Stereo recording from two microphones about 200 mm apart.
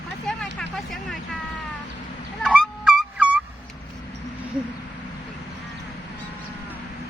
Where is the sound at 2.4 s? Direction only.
Centre (ahead or behind).